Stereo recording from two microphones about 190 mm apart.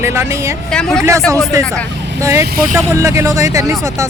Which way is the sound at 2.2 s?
15° right (ahead or behind).